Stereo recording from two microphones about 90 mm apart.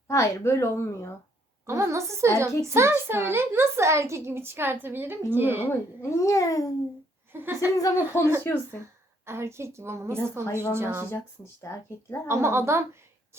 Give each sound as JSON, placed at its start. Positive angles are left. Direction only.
{"t": 0.1, "sound": "speech", "side_deg": 30}
{"t": 1.6, "sound": "a woman's voice", "side_deg": -35}
{"t": 5.6, "sound": "speech", "side_deg": 35}
{"t": 7.3, "sound": "a woman's voice", "side_deg": -25}
{"t": 7.8, "sound": "speech", "side_deg": 35}
{"t": 9.2, "sound": "a woman's voice", "side_deg": -30}
{"t": 10.4, "sound": "speech", "side_deg": 30}
{"t": 10.7, "sound": "a woman's voice", "side_deg": -25}
{"t": 11.7, "sound": "speech", "side_deg": 35}
{"t": 12.3, "sound": "a woman's voice", "side_deg": -30}